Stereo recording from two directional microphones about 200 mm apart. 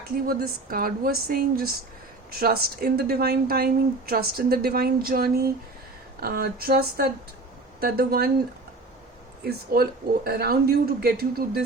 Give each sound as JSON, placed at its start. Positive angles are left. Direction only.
{"t": 0.3, "sound": "a woman's voice", "side_deg": -45}
{"t": 9.4, "sound": "a woman's voice", "side_deg": -50}